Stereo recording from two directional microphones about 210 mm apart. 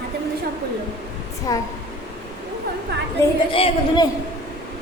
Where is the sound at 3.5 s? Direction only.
25° left (ahead or behind).